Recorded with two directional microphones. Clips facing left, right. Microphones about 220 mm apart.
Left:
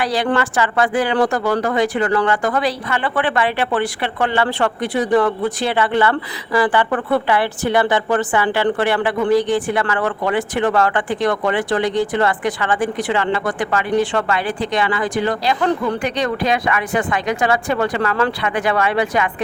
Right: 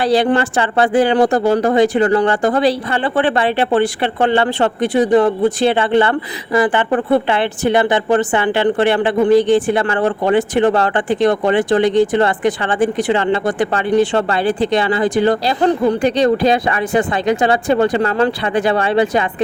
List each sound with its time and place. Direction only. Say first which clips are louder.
0.0 s a woman's voice: right 5 dB; 25° right (ahead or behind)